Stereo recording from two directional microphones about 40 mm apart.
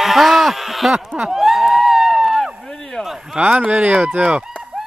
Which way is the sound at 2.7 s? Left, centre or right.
Centre.